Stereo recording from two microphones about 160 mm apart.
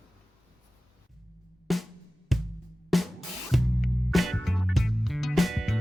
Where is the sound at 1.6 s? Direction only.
Centre (ahead or behind).